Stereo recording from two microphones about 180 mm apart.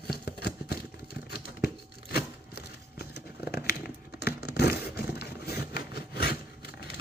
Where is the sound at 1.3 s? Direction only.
60° left (ahead or behind).